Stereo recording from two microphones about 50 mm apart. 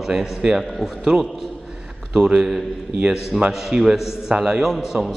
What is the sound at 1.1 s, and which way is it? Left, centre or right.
Speech, centre.